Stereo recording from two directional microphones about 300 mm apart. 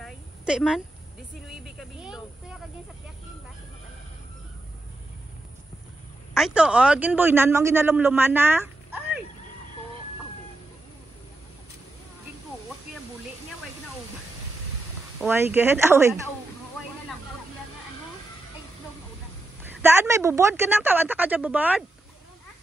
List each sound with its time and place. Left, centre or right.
0.0 s a sound: centre
6.3 s a man's voice: centre
15.2 s a man's voice: centre
19.6 s a man's voice: centre